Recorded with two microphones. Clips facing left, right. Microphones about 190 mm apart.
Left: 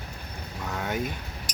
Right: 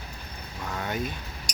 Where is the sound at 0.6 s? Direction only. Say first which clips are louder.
Left 1 dB; 5° left (ahead or behind).